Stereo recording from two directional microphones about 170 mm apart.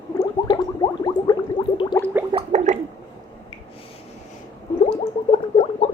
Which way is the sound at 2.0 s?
15° left (ahead or behind).